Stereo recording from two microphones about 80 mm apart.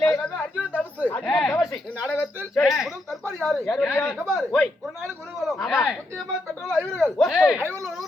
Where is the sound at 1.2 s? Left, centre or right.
Centre.